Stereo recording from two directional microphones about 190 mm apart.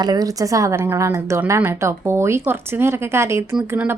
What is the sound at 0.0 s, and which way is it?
Speech, 20° right (ahead or behind).